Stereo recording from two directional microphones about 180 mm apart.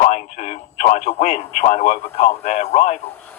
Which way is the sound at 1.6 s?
40° left (ahead or behind).